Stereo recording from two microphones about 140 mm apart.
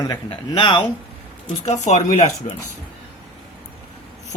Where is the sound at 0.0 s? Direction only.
30° left (ahead or behind).